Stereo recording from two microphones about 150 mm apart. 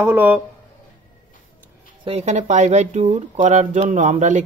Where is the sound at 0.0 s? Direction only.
10° right (ahead or behind).